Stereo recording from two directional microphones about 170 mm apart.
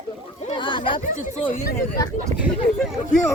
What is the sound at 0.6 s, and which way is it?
Speech, 30° left (ahead or behind).